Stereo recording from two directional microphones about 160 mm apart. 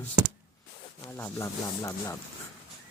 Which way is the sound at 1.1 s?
15° left (ahead or behind).